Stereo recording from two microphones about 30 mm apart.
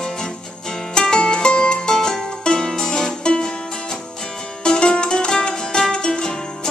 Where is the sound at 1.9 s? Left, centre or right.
Centre.